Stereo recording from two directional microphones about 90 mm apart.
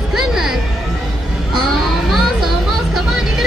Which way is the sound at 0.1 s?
5° right (ahead or behind).